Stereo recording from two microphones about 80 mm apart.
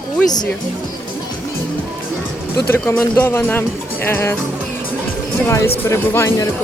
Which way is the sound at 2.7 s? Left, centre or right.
Left.